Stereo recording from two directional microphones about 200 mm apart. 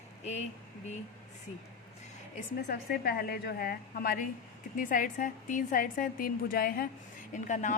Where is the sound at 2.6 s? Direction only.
50° left (ahead or behind).